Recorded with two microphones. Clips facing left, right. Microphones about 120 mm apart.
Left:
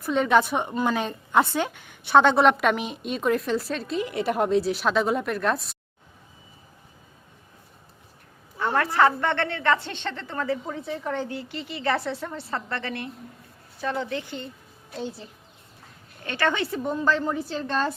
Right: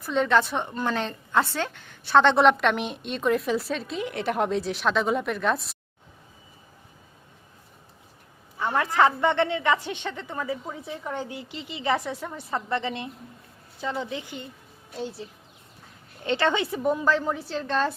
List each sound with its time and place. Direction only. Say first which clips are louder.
0.0 s a woman's voice: left 2 dB; 10° left (ahead or behind)
2.3 s a woman's voice: even; 5° left (ahead or behind)
8.5 s a woman's voice: left 1 dB; 15° right (ahead or behind)
14.9 s a woman's voice: even; 5° right (ahead or behind)
16.2 s a woman's voice: right 2 dB; 20° right (ahead or behind)
16.8 s a woman's voice: right 1 dB; 5° right (ahead or behind)